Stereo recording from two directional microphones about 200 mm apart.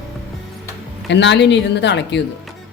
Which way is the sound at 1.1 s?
60° left (ahead or behind).